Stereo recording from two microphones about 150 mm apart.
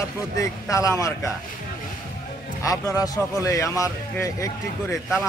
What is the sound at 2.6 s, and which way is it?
A man's voice, 20° left (ahead or behind).